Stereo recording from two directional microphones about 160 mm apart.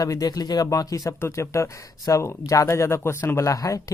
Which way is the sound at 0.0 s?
25° left (ahead or behind).